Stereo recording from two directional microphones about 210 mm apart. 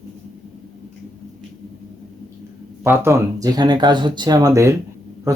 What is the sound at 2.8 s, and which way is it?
Speech, 10° right (ahead or behind).